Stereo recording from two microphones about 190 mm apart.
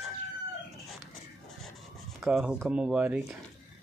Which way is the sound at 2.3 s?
5° right (ahead or behind).